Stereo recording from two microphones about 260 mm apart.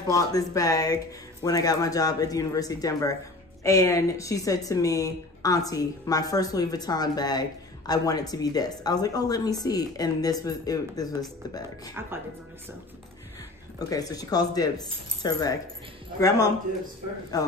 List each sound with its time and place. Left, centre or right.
0.0 s a woman's voice: centre
13.7 s a woman's voice: centre